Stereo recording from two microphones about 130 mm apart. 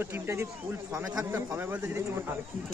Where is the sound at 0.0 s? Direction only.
15° right (ahead or behind).